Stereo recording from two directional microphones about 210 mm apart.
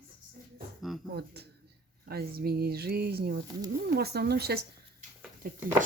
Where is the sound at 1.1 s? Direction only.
50° right (ahead or behind).